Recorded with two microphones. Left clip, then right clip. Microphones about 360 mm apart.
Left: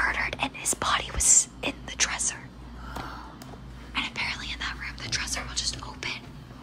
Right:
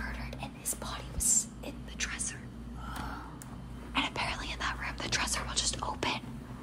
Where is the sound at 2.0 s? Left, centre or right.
Centre.